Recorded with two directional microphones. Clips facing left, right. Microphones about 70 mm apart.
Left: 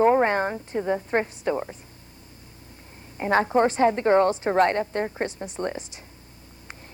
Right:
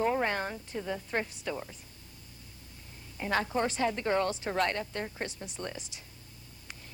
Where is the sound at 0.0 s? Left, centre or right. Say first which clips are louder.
Left 10 dB; left.